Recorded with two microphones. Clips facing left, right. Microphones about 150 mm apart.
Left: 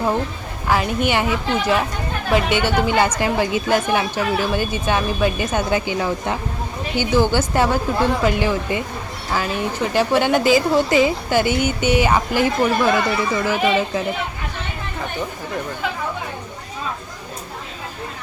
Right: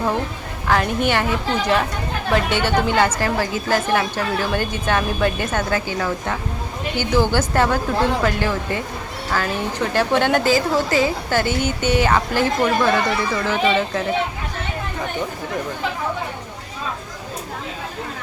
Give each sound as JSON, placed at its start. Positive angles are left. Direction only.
{"t": 0.7, "sound": "speech", "side_deg": 10}
{"t": 9.9, "sound": "speech", "side_deg": 10}